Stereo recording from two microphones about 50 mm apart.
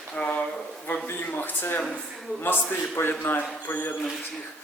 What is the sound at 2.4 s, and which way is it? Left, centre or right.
A man's voice, left.